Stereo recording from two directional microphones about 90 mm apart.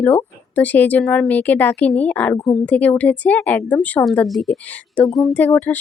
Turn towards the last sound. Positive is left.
turn(degrees=20)  # may be behind; listen again after turning